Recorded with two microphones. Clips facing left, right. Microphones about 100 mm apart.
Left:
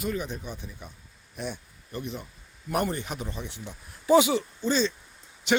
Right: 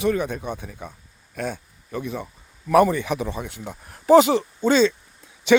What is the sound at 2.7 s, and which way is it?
Speech, 90° right.